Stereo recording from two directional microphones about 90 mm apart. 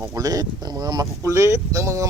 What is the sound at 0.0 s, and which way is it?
Speech, 35° right (ahead or behind).